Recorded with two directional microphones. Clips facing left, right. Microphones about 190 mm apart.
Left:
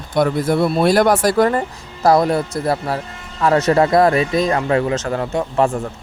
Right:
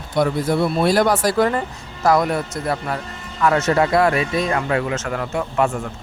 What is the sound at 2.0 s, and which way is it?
Speech, 35° left (ahead or behind).